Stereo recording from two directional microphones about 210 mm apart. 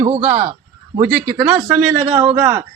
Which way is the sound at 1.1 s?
5° right (ahead or behind).